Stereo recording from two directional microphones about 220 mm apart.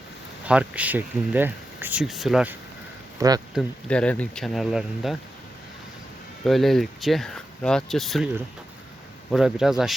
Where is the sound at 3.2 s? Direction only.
15° right (ahead or behind).